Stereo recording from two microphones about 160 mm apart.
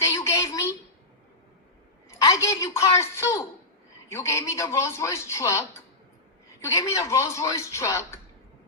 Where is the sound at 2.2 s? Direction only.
15° left (ahead or behind).